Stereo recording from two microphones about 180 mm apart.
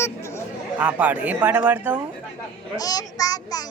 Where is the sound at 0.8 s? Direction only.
10° right (ahead or behind).